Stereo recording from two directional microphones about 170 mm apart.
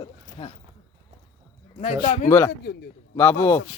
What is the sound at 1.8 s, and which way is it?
Speech, 35° left (ahead or behind).